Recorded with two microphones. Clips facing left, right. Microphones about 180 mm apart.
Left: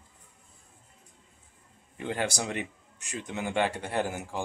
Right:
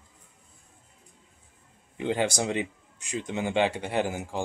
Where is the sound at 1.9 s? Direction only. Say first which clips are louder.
Right 4 dB; 20° right (ahead or behind).